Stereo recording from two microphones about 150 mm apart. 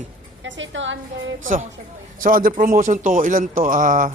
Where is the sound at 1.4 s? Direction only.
55° right (ahead or behind).